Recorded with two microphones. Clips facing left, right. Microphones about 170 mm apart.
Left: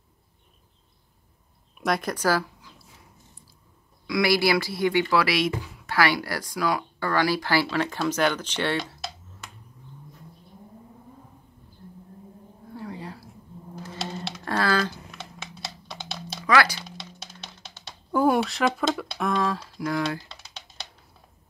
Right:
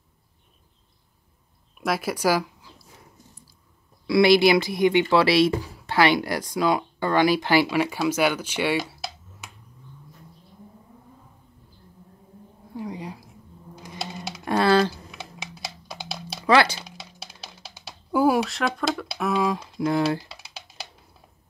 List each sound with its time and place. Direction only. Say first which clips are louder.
1.8 s speech: right 1 dB; 5° right (ahead or behind)
4.1 s speech: right 6 dB; 25° right (ahead or behind)
5.9 s speech: right 4 dB; 20° right (ahead or behind)
12.7 s a sound: right 3 dB; 15° right (ahead or behind)
14.4 s typing: right 6 dB; 20° right (ahead or behind)
15.0 s a sound: right 2 dB; centre (ahead or behind)
16.4 s a sound: right 3 dB; 25° right (ahead or behind)
17.6 s typing: right 2 dB; 5° right (ahead or behind); by 20.2 s 25° right (ahead or behind)
20.2 s typing: right 2 dB; 5° right (ahead or behind)